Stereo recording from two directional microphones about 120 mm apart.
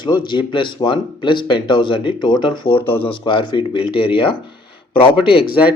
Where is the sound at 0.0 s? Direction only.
40° left (ahead or behind).